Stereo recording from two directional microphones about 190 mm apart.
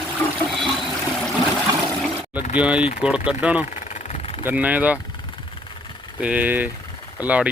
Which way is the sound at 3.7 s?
40° left (ahead or behind).